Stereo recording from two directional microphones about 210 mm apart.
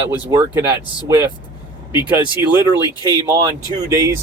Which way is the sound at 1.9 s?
20° left (ahead or behind).